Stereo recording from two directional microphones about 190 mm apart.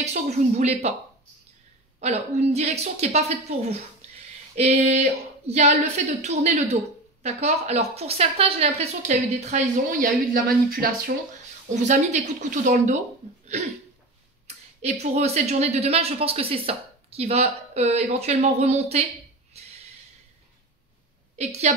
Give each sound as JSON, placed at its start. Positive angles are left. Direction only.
{"t": 0.0, "sound": "speech", "side_deg": -35}
{"t": 2.0, "sound": "speech", "side_deg": -35}
{"t": 14.8, "sound": "speech", "side_deg": -35}
{"t": 19.6, "sound": "snort", "side_deg": -35}
{"t": 21.4, "sound": "speech", "side_deg": -35}